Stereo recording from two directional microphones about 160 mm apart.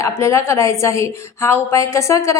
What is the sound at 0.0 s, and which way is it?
A woman's voice, 20° left (ahead or behind).